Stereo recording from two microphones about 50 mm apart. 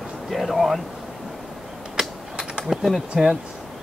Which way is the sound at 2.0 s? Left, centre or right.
Centre.